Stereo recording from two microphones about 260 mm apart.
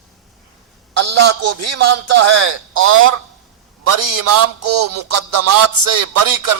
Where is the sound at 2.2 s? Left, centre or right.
Right.